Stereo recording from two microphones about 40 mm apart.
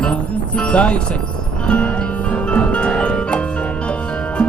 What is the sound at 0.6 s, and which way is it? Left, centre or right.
Speech, left.